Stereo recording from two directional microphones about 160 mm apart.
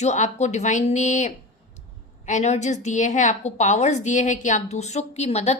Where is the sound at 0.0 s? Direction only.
45° left (ahead or behind).